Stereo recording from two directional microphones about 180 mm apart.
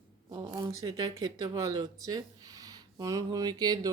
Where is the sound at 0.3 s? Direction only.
20° right (ahead or behind).